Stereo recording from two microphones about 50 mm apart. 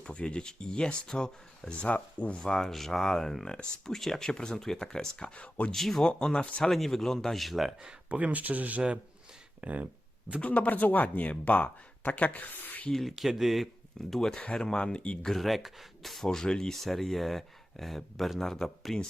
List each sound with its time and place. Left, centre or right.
0.0 s speech: left
2.4 s speech: centre
5.7 s speech: centre
6.1 s speech: centre
6.6 s speech: centre
8.1 s speech: right
9.6 s a sound: right
10.4 s speech: left
12.9 s speech: centre
14.1 s speech: centre
15.3 s speech: centre
16.2 s speech: centre